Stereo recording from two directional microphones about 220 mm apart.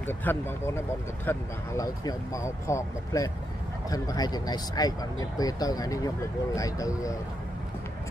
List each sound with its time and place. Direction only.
0.0 s speech: 10° left (ahead or behind)